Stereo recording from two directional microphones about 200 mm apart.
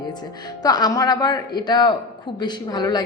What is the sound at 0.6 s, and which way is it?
A woman's voice, 20° left (ahead or behind).